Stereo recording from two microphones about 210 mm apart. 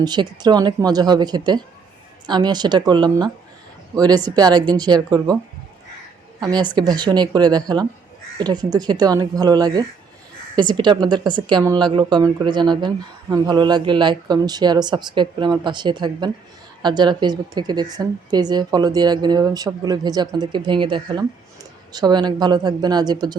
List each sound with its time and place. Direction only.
0.0 s a woman's voice: 20° right (ahead or behind)
6.4 s a woman's voice: 20° right (ahead or behind)